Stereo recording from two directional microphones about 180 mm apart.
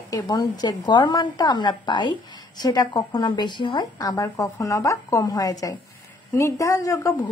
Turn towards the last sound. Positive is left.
turn(degrees=20)  # may be behind; listen again after turning